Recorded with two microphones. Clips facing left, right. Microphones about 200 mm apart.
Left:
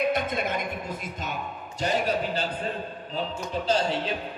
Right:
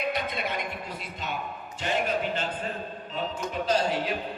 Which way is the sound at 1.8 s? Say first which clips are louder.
Left 2 dB; 35° left (ahead or behind).